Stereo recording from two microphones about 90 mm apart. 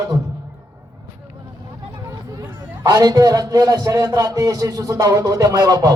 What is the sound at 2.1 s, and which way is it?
A man's voice, 40° right (ahead or behind).